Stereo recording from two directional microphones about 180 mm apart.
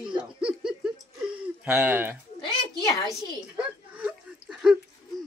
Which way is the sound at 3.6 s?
10° right (ahead or behind).